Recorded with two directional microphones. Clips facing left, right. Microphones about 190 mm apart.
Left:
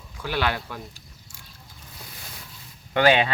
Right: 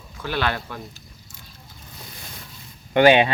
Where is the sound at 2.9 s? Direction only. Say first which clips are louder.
Right 5 dB; 20° right (ahead or behind).